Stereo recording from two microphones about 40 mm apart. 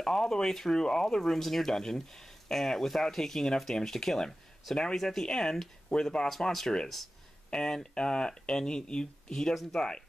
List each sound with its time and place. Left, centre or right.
0.0 s speech: centre